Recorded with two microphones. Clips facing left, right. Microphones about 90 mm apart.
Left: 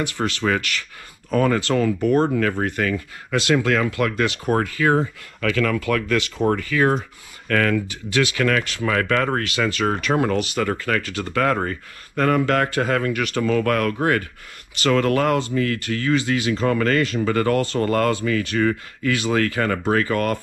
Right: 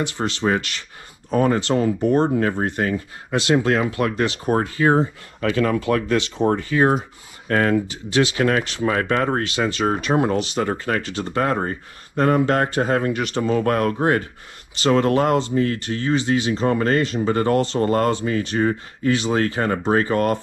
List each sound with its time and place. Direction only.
0.0 s speech: 25° right (ahead or behind)